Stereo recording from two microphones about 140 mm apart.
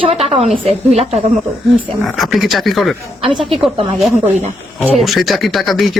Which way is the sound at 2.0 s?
Centre (ahead or behind).